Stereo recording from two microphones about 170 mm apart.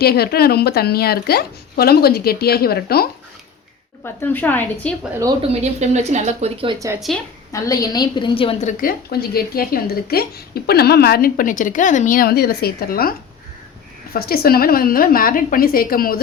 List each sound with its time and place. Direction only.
0.0 s a woman's voice: 65° left (ahead or behind)
4.0 s a woman's voice: 10° left (ahead or behind)
5.4 s speech: 40° right (ahead or behind)
7.1 s a woman's voice: centre (ahead or behind)
7.5 s a woman's voice: 20° left (ahead or behind)
8.6 s a woman's voice: 60° left (ahead or behind)